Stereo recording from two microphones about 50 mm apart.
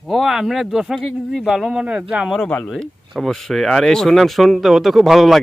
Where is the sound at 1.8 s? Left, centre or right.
Right.